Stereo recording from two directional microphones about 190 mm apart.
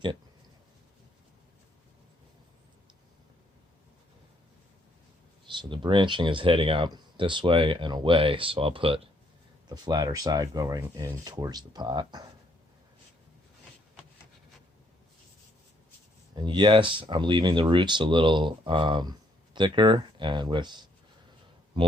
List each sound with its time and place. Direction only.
5.5 s speech: 25° right (ahead or behind)
16.3 s speech: 25° right (ahead or behind)